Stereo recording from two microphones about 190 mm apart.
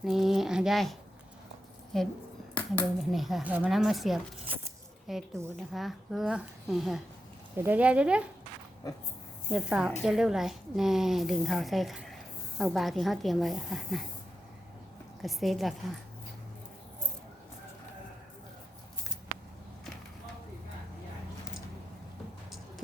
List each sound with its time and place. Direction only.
0.0 s a woman's voice: centre (ahead or behind)
7.5 s speech: 10° right (ahead or behind)
8.8 s speech: 20° left (ahead or behind)
9.5 s a woman's voice: 5° right (ahead or behind)
15.2 s a woman's voice: centre (ahead or behind)